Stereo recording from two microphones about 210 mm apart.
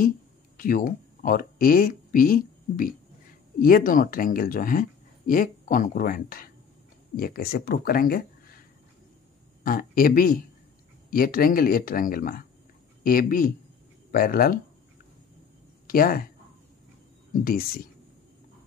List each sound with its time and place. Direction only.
0.6 s speech: 40° left (ahead or behind)
9.6 s speech: 45° left (ahead or behind)
15.9 s speech: 45° left (ahead or behind)
17.3 s speech: 45° left (ahead or behind)